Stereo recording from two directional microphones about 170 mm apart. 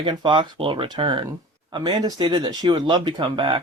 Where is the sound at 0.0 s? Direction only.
30° right (ahead or behind).